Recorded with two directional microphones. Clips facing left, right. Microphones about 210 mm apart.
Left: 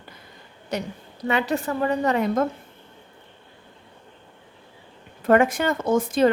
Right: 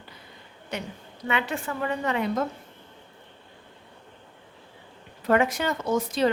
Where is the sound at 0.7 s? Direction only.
40° left (ahead or behind).